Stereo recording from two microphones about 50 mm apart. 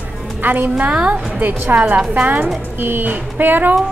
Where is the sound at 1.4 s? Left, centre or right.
Right.